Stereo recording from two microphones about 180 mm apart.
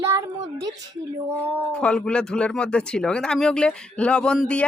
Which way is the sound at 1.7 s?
5° left (ahead or behind).